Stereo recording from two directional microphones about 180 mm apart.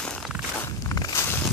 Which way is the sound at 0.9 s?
20° left (ahead or behind).